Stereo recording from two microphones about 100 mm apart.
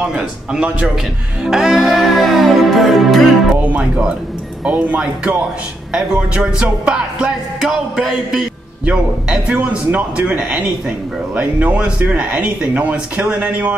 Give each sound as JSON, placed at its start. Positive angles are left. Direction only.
{"t": 0.0, "sound": "music", "side_deg": -5}
{"t": 3.6, "sound": "music", "side_deg": -10}